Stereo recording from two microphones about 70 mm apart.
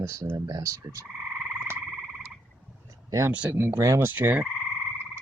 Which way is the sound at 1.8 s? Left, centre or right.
Centre.